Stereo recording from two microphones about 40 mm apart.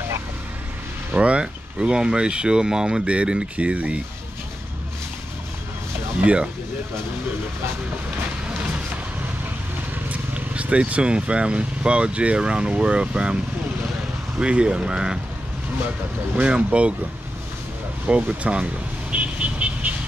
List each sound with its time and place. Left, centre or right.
1.1 s speech: right
6.2 s speech: right
10.0 s speech: right
14.4 s speech: right
16.3 s speech: right
18.0 s vehicle: right